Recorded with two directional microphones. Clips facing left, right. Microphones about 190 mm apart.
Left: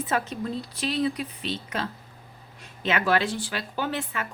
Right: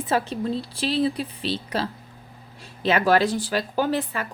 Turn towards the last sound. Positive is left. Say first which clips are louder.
# right 6 dB
turn(degrees=-35)  # may be behind; listen again after turning